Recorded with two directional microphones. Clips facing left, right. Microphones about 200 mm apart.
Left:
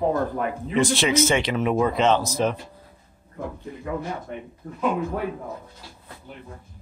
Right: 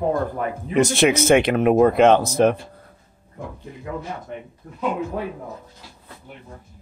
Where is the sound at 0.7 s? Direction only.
50° right (ahead or behind).